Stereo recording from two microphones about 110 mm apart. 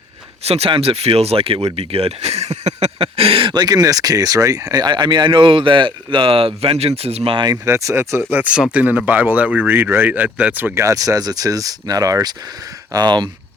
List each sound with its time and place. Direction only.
0.4 s speech: 70° right (ahead or behind)
7.5 s speech: 30° right (ahead or behind)
10.8 s speech: 30° right (ahead or behind)